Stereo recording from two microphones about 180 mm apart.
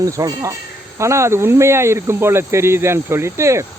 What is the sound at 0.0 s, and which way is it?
Speech, 20° right (ahead or behind).